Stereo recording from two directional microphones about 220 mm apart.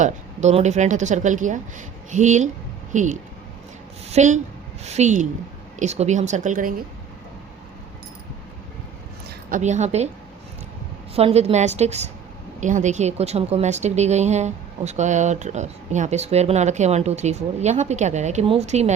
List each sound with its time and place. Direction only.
0.0 s a woman's voice: 30° right (ahead or behind)
9.5 s a woman's voice: 35° right (ahead or behind)
11.1 s a woman's voice: 25° right (ahead or behind)